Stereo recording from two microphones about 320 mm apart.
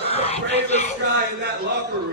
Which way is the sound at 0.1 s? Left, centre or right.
Centre.